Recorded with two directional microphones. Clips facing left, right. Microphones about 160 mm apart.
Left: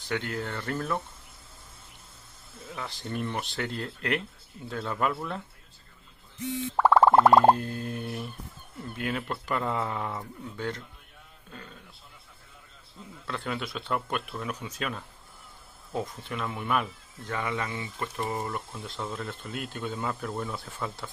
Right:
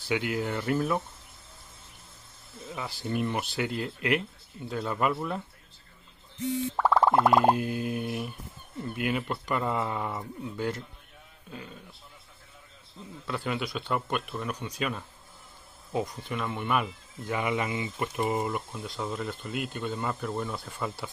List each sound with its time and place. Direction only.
0.1 s speech: 10° right (ahead or behind)
2.7 s speech: 5° right (ahead or behind)
7.1 s a sound: 60° left (ahead or behind)
7.5 s speech: 10° right (ahead or behind)
13.3 s speech: centre (ahead or behind)
17.3 s speech: 15° right (ahead or behind)